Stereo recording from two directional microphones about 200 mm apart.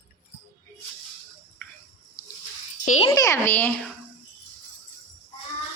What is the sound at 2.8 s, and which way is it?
Speech, 35° left (ahead or behind).